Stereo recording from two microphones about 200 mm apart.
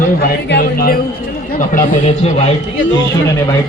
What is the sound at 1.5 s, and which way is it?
Speech, 40° left (ahead or behind).